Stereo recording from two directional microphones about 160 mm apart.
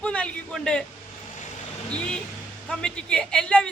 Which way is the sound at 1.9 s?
5° left (ahead or behind).